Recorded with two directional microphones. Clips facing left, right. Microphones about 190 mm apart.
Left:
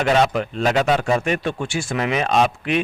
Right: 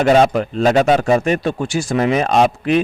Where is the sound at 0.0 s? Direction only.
40° right (ahead or behind).